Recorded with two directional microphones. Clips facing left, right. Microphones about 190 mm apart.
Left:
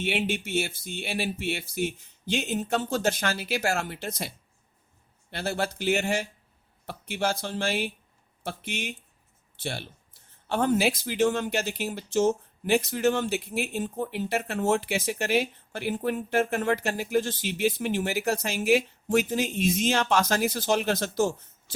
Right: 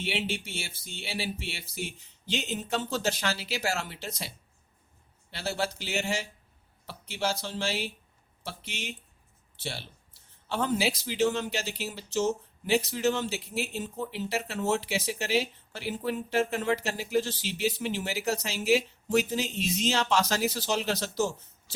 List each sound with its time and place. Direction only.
0.0 s speech: 55° left (ahead or behind)
5.3 s speech: 55° left (ahead or behind)